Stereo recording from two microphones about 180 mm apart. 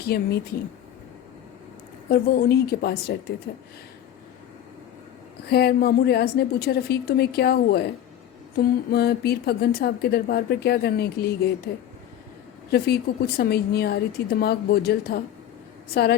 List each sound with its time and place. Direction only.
0.0 s a woman's voice: 60° left (ahead or behind)
2.0 s a woman's voice: 60° left (ahead or behind)
5.5 s a woman's voice: 65° left (ahead or behind)
12.7 s a woman's voice: 60° left (ahead or behind)